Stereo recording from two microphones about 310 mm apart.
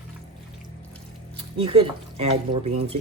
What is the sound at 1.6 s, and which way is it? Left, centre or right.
Speech, centre.